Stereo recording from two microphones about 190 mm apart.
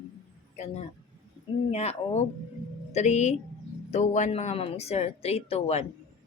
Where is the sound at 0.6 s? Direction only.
35° left (ahead or behind).